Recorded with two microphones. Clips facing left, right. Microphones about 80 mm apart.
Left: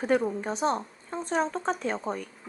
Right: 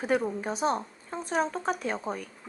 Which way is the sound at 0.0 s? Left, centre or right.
Centre.